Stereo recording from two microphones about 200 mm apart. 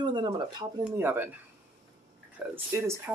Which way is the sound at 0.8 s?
10° right (ahead or behind).